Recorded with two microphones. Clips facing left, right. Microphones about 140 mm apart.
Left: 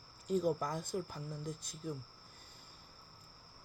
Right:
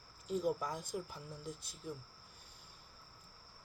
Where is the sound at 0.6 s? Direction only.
10° right (ahead or behind).